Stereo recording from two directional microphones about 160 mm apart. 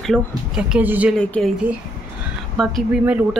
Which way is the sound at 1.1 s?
5° left (ahead or behind).